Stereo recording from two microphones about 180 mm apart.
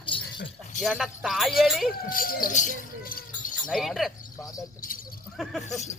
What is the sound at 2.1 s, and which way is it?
Speech, 55° left (ahead or behind).